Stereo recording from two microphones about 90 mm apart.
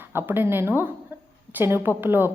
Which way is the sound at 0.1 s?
25° right (ahead or behind).